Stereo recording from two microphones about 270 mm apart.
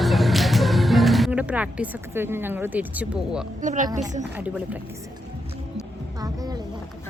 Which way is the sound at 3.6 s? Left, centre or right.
Right.